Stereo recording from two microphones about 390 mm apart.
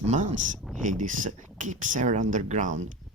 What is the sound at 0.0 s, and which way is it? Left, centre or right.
Speech, centre.